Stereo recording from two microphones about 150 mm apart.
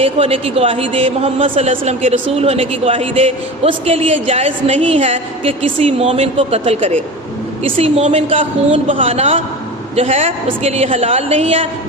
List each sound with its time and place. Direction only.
0.0 s a woman's voice: 40° right (ahead or behind)